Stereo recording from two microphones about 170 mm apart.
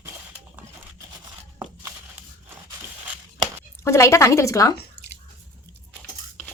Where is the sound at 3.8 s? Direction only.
15° left (ahead or behind).